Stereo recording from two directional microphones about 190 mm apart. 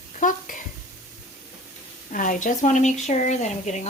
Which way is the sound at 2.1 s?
45° left (ahead or behind).